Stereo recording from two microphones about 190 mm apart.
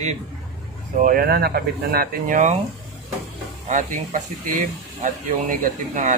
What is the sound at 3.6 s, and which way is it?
Speech, 40° right (ahead or behind).